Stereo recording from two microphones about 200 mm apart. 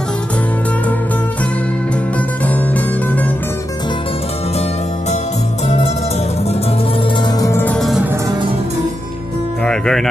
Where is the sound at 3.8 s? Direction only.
25° left (ahead or behind); by 8.3 s 10° right (ahead or behind).